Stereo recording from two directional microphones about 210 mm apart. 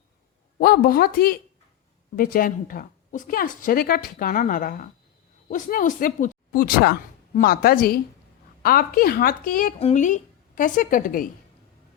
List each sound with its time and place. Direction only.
0.6 s a woman's voice: 45° left (ahead or behind)